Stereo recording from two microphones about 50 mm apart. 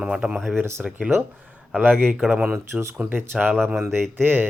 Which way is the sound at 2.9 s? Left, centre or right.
Right.